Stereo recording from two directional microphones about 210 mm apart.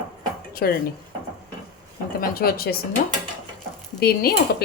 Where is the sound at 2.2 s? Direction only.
45° left (ahead or behind).